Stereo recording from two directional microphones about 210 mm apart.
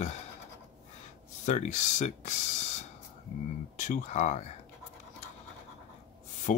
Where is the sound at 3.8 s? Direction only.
35° left (ahead or behind).